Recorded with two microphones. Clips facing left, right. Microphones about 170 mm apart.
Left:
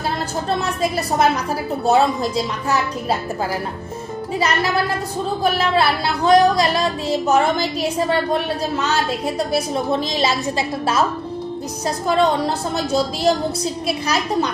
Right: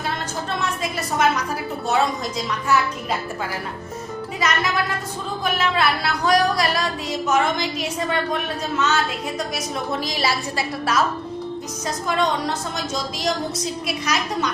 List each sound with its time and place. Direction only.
0.6 s music: 35° left (ahead or behind)
4.4 s music: 35° left (ahead or behind)
12.0 s music: 35° left (ahead or behind)